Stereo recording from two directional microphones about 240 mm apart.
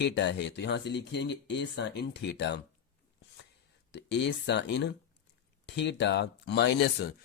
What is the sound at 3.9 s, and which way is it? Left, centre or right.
Speech, left.